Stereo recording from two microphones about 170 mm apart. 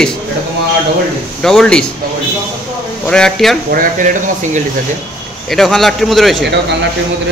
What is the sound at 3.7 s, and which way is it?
Speech, 55° right (ahead or behind).